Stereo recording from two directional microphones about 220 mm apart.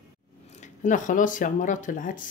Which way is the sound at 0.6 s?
35° left (ahead or behind).